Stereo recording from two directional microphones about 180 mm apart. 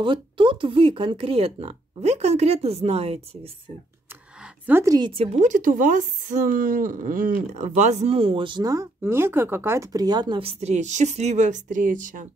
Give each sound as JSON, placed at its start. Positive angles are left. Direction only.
{"t": 0.0, "sound": "speech", "side_deg": -25}
{"t": 4.6, "sound": "a woman's voice", "side_deg": -15}
{"t": 5.4, "sound": "speech", "side_deg": -45}